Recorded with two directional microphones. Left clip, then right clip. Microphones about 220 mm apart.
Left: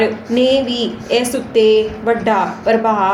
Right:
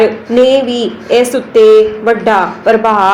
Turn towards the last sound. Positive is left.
turn(degrees=-15)  # may be behind; listen again after turning